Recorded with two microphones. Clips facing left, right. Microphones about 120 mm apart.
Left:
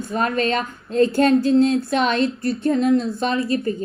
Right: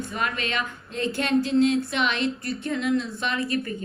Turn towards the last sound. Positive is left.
turn(degrees=30)  # may be behind; listen again after turning